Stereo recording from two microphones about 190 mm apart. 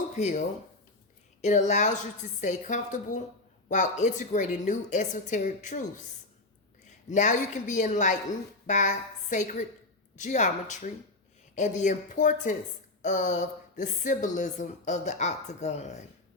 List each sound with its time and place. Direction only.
0.2 s speech: 40° left (ahead or behind)
6.8 s a woman's voice: 40° left (ahead or behind)